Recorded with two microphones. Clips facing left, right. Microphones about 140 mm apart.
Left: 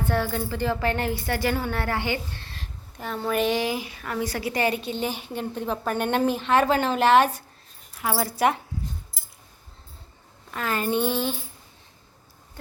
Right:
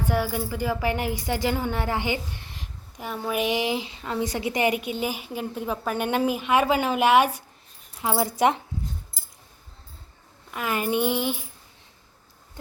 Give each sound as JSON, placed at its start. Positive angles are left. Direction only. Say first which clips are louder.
{"t": 0.0, "sound": "speech", "louder": "even", "side_deg": -10}
{"t": 10.5, "sound": "speech", "louder": "even", "side_deg": -15}